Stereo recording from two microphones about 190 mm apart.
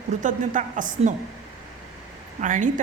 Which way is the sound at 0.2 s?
45° right (ahead or behind).